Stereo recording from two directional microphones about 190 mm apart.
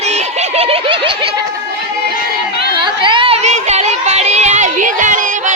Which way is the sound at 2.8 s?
25° right (ahead or behind).